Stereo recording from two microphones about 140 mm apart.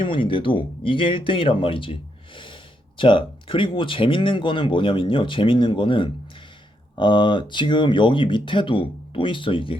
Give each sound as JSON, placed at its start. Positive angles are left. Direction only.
{"t": 0.0, "sound": "speech", "side_deg": 35}